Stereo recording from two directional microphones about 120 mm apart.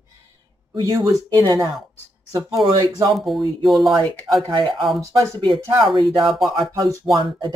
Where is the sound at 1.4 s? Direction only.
35° right (ahead or behind).